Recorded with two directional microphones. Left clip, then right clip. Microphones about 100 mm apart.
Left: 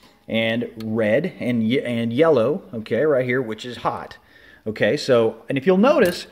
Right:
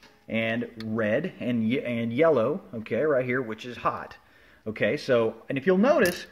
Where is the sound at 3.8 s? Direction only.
10° left (ahead or behind).